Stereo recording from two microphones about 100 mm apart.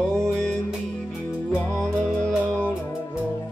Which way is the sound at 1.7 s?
5° left (ahead or behind).